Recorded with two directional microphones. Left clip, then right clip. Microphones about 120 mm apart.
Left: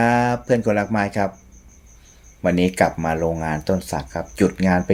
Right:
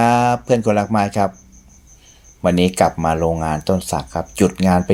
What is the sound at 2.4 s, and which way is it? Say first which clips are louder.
Speech: right 3 dB; 20° right (ahead or behind).